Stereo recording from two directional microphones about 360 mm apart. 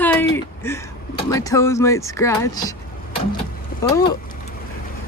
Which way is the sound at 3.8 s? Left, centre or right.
Centre.